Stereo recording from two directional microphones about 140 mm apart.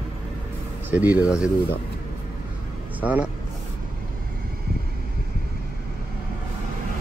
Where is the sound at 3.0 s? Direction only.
10° right (ahead or behind).